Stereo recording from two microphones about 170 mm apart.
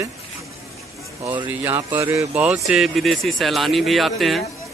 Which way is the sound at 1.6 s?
15° right (ahead or behind).